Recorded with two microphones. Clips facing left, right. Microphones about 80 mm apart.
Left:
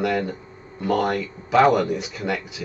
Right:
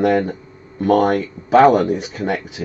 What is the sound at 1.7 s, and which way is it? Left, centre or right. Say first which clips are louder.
Speech: right 5 dB; right.